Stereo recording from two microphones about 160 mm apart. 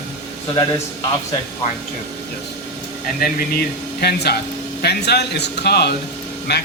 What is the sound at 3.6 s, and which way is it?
A man's voice, 85° left.